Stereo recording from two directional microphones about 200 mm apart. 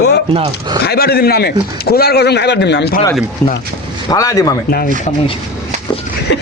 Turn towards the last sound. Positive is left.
turn(degrees=60)  # may be behind; listen again after turning